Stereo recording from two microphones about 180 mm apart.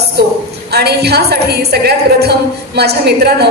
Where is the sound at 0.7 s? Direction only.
65° right (ahead or behind).